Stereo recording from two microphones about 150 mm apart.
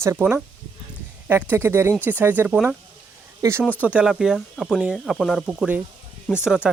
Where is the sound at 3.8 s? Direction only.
5° right (ahead or behind).